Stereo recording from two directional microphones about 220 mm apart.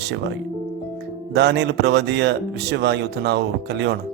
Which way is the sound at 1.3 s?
50° right (ahead or behind).